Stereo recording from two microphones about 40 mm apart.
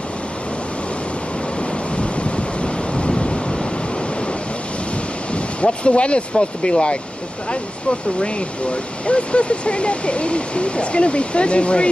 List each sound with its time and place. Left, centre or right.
2.0 s waves: left
5.3 s speech: left
8.2 s speech: left